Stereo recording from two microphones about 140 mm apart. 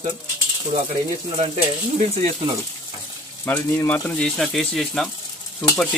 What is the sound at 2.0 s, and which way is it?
Speech, 50° right (ahead or behind).